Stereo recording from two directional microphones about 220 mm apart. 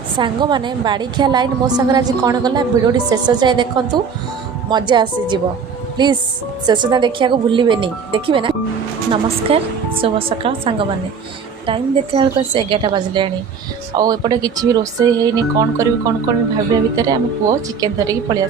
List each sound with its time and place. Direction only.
0.2 s a woman's voice: 20° right (ahead or behind)
4.7 s a woman's voice: 20° right (ahead or behind)